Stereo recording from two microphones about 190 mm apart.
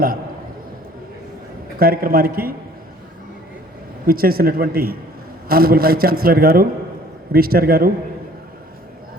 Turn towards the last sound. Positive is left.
turn(degrees=-50)  # may be behind; listen again after turning